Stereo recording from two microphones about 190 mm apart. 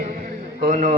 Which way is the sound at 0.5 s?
40° right (ahead or behind).